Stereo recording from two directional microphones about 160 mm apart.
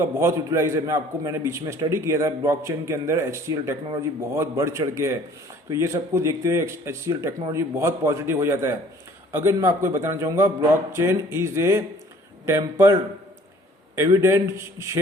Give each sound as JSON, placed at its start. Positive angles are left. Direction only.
{"t": 0.0, "sound": "a man's voice", "side_deg": -15}